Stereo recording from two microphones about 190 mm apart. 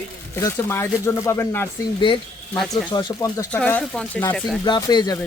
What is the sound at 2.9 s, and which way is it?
Speech, 20° left (ahead or behind).